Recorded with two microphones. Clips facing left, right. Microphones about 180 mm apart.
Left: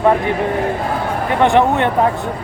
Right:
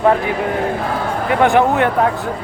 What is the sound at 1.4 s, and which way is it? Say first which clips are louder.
Speech: even; centre (ahead or behind).